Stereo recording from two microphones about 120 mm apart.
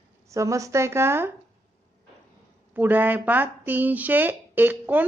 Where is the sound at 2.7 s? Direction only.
15° right (ahead or behind).